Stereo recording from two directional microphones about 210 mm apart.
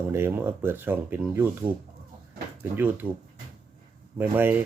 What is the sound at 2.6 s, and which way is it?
Speech, 10° right (ahead or behind).